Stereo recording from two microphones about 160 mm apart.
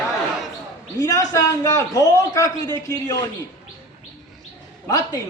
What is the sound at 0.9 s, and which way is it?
A man's voice, 20° left (ahead or behind).